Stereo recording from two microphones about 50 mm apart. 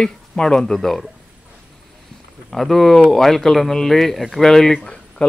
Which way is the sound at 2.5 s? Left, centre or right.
Centre.